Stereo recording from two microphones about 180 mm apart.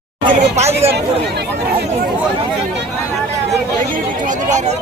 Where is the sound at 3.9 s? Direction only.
45° right (ahead or behind).